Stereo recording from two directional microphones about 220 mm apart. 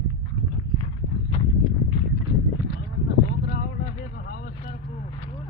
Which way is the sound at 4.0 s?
40° left (ahead or behind).